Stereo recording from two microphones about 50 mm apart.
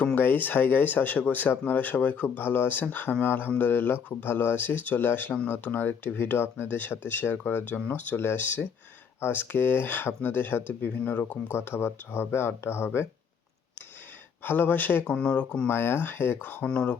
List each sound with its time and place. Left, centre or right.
0.0 s speech: left
8.2 s speech: left
11.0 s speech: left
11.5 s speech: left
14.4 s speech: left
15.0 s speech: left
15.6 s speech: left
16.4 s speech: left
16.6 s speech: left